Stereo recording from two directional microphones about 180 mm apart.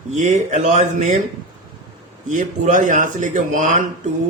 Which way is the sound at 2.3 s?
45° right (ahead or behind).